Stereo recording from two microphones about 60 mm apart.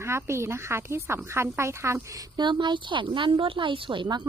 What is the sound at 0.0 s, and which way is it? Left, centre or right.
Speech, right.